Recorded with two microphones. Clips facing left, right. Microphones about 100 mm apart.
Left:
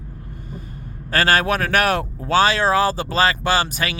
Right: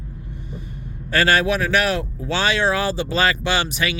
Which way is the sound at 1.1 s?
40° left (ahead or behind).